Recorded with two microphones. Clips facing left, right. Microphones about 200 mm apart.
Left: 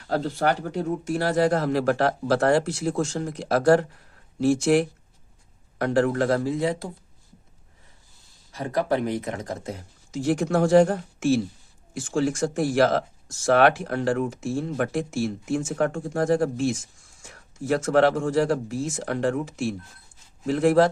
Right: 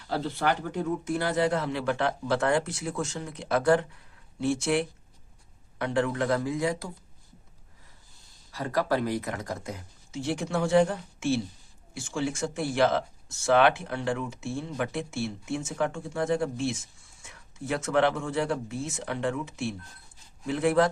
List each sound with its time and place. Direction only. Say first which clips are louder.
0.1 s speech: left 4 dB; 45° left (ahead or behind)
8.5 s speech: left 3 dB; 20° left (ahead or behind)
10.2 s speech: left 7 dB; 50° left (ahead or behind)